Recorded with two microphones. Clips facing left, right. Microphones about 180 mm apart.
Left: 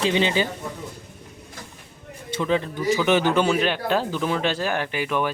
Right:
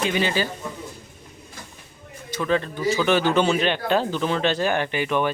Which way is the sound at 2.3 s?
15° left (ahead or behind).